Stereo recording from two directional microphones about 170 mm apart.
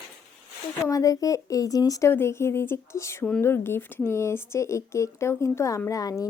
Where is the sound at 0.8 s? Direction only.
20° left (ahead or behind).